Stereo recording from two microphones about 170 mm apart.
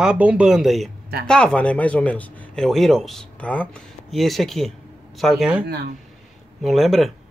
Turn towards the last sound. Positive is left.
turn(degrees=0)  # may be behind; listen again after turning